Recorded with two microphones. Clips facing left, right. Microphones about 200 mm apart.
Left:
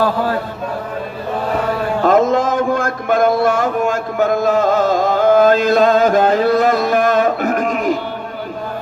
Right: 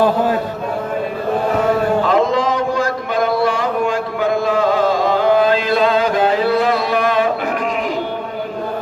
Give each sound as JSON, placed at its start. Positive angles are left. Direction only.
{"t": 0.0, "sound": "a man's voice", "side_deg": -20}
{"t": 2.0, "sound": "mantra", "side_deg": 45}